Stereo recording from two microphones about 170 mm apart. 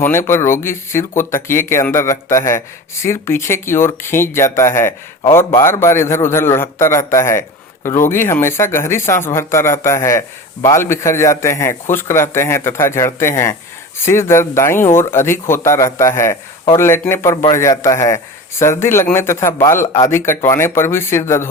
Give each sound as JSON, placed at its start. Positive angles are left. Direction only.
{"t": 0.0, "sound": "a man's voice", "side_deg": 15}